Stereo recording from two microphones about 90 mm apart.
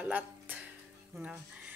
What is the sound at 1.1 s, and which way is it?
Speech, 5° right (ahead or behind).